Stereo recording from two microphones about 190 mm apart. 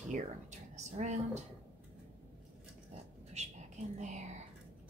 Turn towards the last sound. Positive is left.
turn(degrees=-40)  # may be behind; listen again after turning